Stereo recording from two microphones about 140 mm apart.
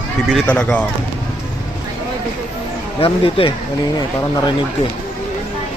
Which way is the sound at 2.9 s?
40° left (ahead or behind).